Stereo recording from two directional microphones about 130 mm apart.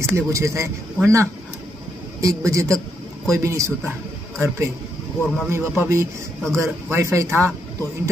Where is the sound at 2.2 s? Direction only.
25° right (ahead or behind).